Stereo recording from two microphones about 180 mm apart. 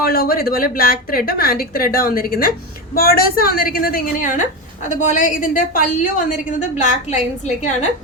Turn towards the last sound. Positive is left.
turn(degrees=40)  # may be behind; listen again after turning